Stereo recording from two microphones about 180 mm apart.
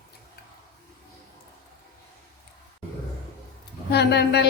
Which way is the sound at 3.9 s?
70° left (ahead or behind).